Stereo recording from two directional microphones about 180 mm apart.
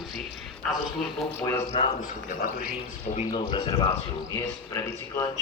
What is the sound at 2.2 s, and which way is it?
Speech, 50° left (ahead or behind).